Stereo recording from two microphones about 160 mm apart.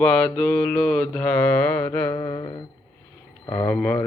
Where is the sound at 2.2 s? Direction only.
25° left (ahead or behind).